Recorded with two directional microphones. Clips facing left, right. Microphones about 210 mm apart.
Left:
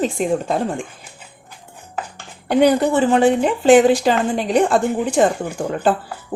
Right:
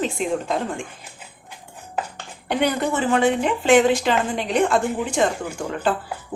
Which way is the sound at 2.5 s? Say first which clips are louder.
Left 7 dB; 35° left (ahead or behind).